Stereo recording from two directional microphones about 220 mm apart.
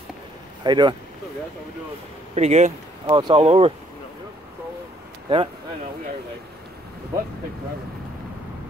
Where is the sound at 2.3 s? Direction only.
30° right (ahead or behind).